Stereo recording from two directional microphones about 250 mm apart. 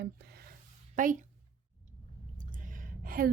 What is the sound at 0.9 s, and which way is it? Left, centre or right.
Speech, right.